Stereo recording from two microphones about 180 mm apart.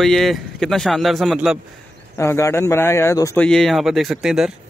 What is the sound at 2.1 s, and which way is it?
Speech, 15° left (ahead or behind).